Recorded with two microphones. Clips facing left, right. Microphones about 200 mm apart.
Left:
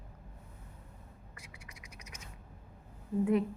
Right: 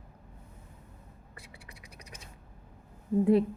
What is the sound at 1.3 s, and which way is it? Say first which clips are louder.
Scratch: right 5 dB; 35° right (ahead or behind).